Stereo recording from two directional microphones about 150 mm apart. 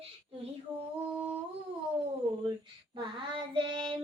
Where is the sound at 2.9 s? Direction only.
35° right (ahead or behind).